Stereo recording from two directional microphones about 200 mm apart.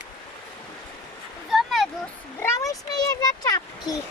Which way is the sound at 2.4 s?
15° left (ahead or behind).